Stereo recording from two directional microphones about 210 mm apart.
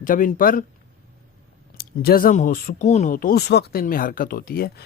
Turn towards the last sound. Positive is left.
turn(degrees=45)  # may be behind; listen again after turning